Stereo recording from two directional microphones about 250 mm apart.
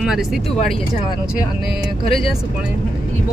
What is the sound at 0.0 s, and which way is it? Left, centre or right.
Speech, centre.